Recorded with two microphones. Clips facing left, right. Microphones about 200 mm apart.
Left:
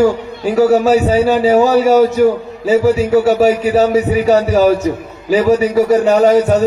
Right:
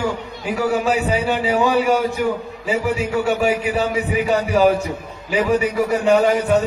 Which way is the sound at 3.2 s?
40° left (ahead or behind).